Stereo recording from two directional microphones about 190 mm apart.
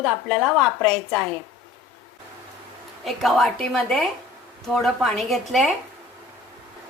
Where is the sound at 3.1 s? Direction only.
Centre (ahead or behind).